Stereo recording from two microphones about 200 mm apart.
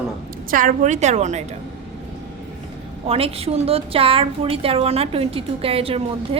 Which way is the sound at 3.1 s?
30° right (ahead or behind).